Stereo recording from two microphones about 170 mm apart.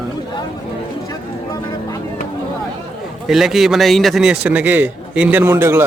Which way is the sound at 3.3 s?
Centre (ahead or behind).